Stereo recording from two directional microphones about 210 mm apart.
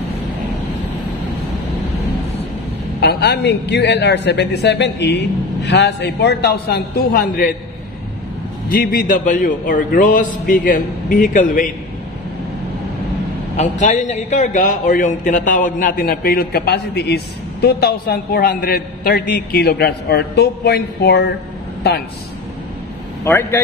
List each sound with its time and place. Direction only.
3.0 s a man's voice: 50° left (ahead or behind)
8.6 s a man's voice: 45° left (ahead or behind)
13.6 s a man's voice: 35° left (ahead or behind); by 21.3 s 50° left (ahead or behind)
23.2 s speech: 10° left (ahead or behind)